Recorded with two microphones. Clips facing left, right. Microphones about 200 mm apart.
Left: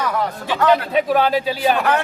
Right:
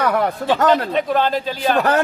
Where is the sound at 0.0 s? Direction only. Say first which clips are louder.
Right 4 dB; 60° right (ahead or behind).